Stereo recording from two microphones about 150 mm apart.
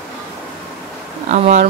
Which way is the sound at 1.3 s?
50° right (ahead or behind).